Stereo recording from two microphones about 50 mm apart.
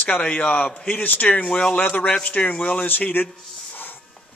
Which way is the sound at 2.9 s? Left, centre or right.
Left.